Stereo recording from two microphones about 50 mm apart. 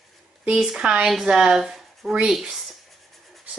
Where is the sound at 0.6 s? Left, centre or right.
Centre.